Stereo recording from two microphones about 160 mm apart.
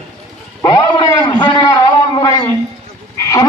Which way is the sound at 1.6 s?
25° left (ahead or behind).